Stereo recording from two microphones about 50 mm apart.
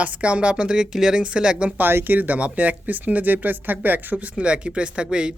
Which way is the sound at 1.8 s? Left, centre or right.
Right.